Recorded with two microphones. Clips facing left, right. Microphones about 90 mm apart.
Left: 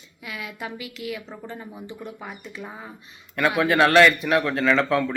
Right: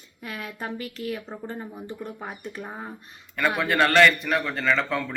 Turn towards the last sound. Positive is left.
turn(degrees=0)  # may be behind; listen again after turning